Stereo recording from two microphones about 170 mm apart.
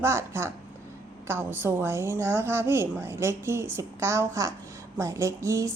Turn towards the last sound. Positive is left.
turn(degrees=-15)  # may be behind; listen again after turning